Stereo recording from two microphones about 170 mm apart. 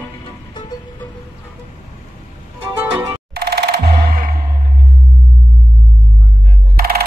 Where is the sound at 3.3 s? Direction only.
70° right (ahead or behind).